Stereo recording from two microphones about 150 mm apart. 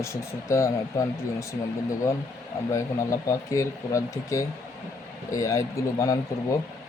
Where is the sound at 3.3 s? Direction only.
20° left (ahead or behind).